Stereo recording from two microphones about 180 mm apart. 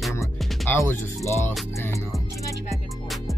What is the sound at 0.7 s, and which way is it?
Speech, 15° left (ahead or behind).